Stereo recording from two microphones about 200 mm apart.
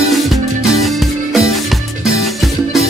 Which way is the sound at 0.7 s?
Centre (ahead or behind).